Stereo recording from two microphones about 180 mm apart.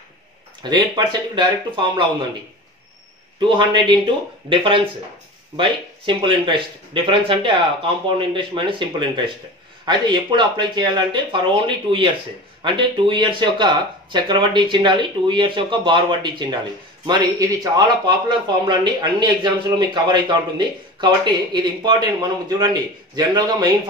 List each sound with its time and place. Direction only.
0.6 s speech: 25° right (ahead or behind)
3.3 s speech: 25° right (ahead or behind)